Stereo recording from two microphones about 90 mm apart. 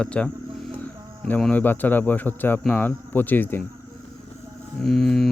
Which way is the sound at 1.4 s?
15° left (ahead or behind).